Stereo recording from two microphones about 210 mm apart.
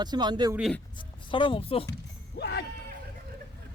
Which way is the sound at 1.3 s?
25° left (ahead or behind).